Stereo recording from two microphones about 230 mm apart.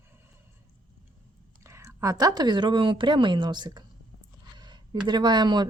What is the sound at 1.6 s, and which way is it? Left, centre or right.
Speech, centre.